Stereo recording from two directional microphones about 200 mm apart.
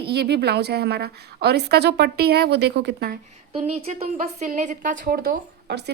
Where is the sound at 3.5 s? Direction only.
30° right (ahead or behind).